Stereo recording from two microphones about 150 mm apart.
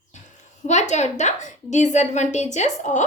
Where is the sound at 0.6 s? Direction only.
50° left (ahead or behind).